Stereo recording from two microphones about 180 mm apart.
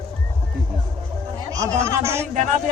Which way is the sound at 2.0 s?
15° right (ahead or behind).